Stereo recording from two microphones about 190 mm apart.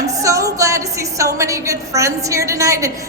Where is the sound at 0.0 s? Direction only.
15° right (ahead or behind).